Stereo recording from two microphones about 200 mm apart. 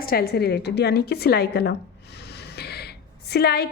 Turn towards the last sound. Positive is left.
turn(degrees=50)  # may be behind; listen again after turning